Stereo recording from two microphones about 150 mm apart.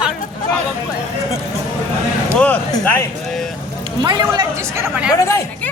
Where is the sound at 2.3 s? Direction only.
10° left (ahead or behind).